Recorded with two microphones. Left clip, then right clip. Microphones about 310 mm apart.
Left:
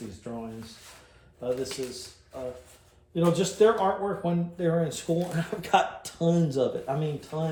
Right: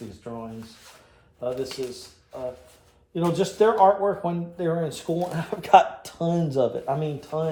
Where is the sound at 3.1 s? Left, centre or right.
Centre.